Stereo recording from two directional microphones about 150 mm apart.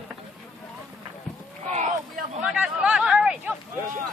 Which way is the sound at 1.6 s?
50° right (ahead or behind).